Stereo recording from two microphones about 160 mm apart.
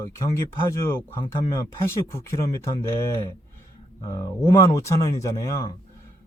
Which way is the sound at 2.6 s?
20° left (ahead or behind).